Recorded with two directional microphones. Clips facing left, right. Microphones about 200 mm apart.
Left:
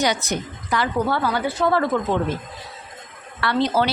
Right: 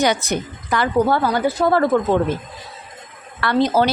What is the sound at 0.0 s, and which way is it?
A woman's voice, 55° right (ahead or behind).